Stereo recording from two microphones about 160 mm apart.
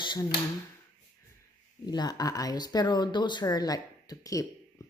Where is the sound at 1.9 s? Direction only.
25° left (ahead or behind).